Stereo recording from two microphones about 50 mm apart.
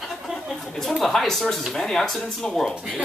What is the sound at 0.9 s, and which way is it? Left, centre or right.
Speech, centre.